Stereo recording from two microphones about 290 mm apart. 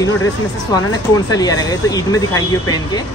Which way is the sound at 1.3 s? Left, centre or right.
Centre.